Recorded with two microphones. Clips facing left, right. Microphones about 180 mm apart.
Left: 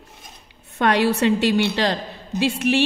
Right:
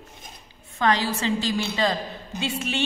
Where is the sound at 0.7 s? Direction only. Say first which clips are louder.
Left 5 dB; 65° left (ahead or behind).